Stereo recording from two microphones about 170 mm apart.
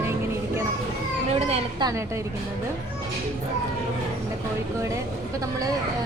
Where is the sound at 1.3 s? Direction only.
35° right (ahead or behind).